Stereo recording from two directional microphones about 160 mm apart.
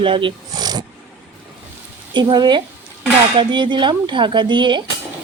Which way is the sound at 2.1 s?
30° right (ahead or behind).